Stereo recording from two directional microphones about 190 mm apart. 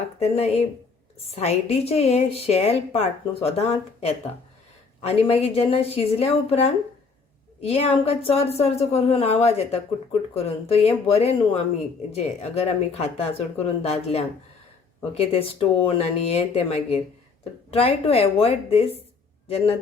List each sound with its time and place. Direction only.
0.2 s a woman's voice: 35° left (ahead or behind)